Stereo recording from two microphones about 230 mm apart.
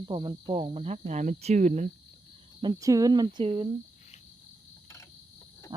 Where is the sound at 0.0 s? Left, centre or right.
Right.